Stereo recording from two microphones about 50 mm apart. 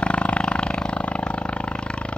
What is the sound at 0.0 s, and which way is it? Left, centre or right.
Roar, left.